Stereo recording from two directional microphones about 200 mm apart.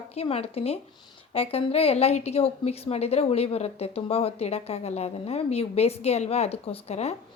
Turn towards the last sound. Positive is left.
turn(degrees=30)  # may be behind; listen again after turning